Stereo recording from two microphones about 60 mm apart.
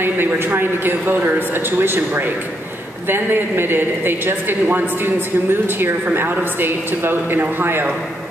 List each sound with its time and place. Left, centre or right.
0.0 s a woman's voice: right